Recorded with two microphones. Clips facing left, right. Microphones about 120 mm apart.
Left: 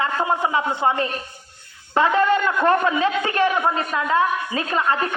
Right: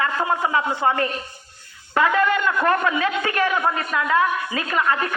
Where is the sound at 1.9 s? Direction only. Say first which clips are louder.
Left 1 dB; 30° left (ahead or behind).